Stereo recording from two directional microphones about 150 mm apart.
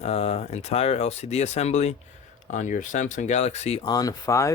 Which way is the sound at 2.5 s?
60° left (ahead or behind).